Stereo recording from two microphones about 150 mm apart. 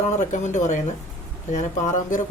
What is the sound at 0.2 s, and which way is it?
Speech, 50° left (ahead or behind).